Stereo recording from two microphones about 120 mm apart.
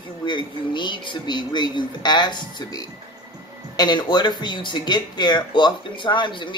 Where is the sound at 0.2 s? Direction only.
40° left (ahead or behind).